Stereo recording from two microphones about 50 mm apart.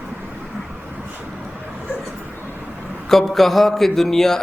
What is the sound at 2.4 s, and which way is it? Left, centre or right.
Vehicle, right.